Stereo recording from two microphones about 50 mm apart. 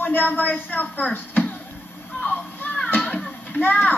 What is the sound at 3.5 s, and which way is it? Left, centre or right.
Speech, left.